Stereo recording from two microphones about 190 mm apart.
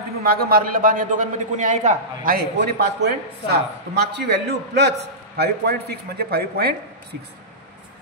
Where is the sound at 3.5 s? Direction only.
60° right (ahead or behind).